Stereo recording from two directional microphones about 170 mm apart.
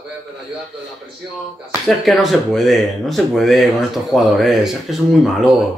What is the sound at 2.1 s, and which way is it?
Speech, centre (ahead or behind).